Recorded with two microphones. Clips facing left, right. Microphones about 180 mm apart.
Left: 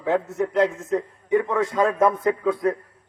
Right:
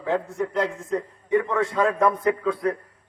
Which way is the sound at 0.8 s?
25° left (ahead or behind).